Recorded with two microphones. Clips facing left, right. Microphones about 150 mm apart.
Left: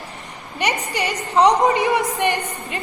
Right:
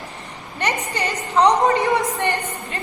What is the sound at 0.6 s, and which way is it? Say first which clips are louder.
A woman's voice: left 1 dB; 15° left (ahead or behind).